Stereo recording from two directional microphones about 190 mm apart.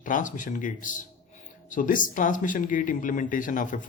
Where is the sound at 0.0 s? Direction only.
45° left (ahead or behind).